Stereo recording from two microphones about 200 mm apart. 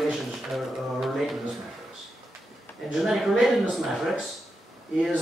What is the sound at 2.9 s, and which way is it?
Speech, centre (ahead or behind).